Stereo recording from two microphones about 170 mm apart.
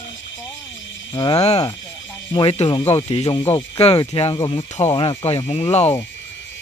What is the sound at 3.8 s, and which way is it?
Speech, 35° left (ahead or behind).